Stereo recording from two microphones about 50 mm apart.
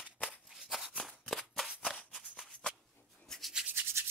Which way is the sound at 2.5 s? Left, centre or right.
Centre.